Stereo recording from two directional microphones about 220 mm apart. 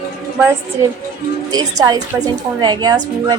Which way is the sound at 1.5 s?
15° right (ahead or behind).